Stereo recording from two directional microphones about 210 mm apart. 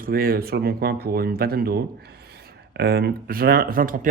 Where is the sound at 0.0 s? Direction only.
45° right (ahead or behind).